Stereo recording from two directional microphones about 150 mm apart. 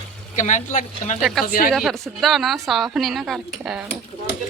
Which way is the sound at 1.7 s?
Centre (ahead or behind).